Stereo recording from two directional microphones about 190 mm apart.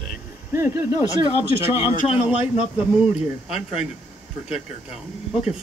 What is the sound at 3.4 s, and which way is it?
Speech, 5° right (ahead or behind).